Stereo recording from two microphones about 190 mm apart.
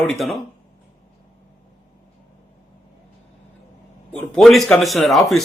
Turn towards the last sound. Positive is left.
turn(degrees=0)  # may be behind; listen again after turning